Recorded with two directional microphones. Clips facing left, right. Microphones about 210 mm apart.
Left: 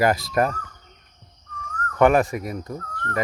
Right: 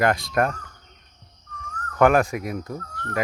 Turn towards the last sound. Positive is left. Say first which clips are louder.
# even
turn(degrees=0)  # may be behind; listen again after turning